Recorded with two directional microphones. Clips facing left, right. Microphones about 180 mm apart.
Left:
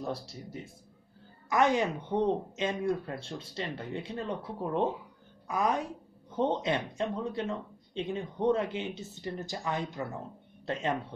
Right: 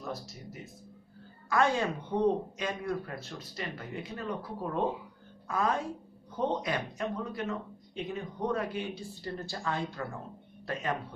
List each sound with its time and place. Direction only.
0.0 s speech: 30° left (ahead or behind)
1.5 s a woman's voice: 20° left (ahead or behind)